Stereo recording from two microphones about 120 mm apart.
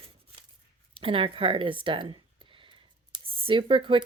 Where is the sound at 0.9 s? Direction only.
50° right (ahead or behind).